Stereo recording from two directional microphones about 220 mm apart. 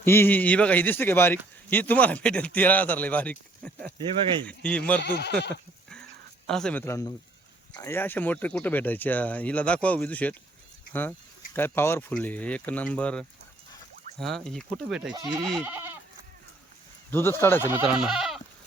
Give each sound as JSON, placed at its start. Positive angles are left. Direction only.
{"t": 0.0, "sound": "speech", "side_deg": 10}
{"t": 5.0, "sound": "speech", "side_deg": 50}
{"t": 6.5, "sound": "speech", "side_deg": 5}
{"t": 11.5, "sound": "speech", "side_deg": 10}
{"t": 15.1, "sound": "speech", "side_deg": -15}
{"t": 15.6, "sound": "goat", "side_deg": -10}
{"t": 17.1, "sound": "speech", "side_deg": 10}
{"t": 17.7, "sound": "speech", "side_deg": -5}